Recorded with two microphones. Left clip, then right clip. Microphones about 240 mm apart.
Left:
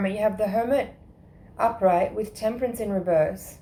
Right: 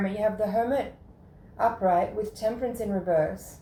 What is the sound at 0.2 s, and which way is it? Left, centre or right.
Speech, left.